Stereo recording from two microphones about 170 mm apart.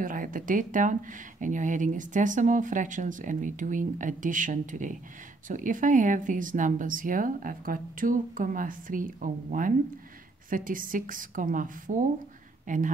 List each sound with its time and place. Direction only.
0.0 s a woman's voice: 55° right (ahead or behind)